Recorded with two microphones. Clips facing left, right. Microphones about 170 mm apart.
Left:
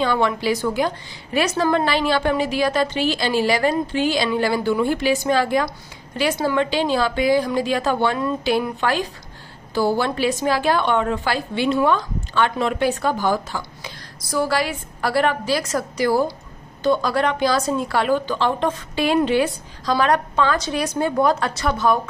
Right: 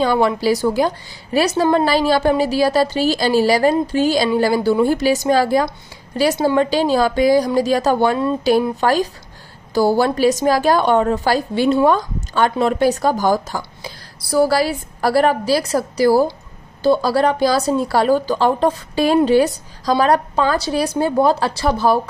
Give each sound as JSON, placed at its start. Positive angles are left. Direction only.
{"t": 0.0, "sound": "a woman's voice", "side_deg": -35}